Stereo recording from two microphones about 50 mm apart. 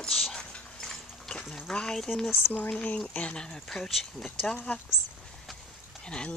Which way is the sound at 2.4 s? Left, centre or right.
Left.